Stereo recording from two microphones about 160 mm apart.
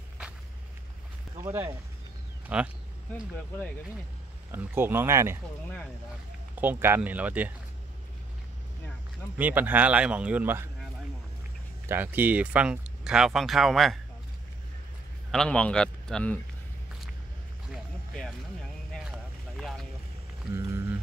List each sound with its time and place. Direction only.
1.4 s speech: 15° right (ahead or behind)
3.1 s speech: 10° left (ahead or behind)
4.5 s speech: 15° right (ahead or behind)
6.5 s speech: 10° right (ahead or behind)
9.4 s speech: 10° right (ahead or behind)
11.9 s speech: 10° right (ahead or behind)
15.3 s speech: 5° left (ahead or behind)
18.1 s a sound: 5° left (ahead or behind)
20.5 s a sound: 15° right (ahead or behind)